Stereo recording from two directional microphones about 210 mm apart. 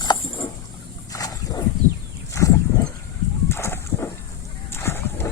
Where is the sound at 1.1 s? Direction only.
15° left (ahead or behind).